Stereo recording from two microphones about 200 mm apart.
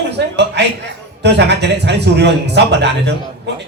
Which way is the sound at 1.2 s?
60° right (ahead or behind).